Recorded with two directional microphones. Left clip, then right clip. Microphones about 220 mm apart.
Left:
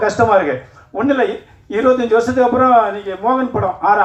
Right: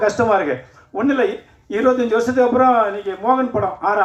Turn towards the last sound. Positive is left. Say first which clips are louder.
# left 4 dB
turn(degrees=-50)  # may be behind; listen again after turning